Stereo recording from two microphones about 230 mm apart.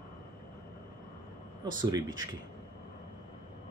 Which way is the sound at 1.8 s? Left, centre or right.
Centre.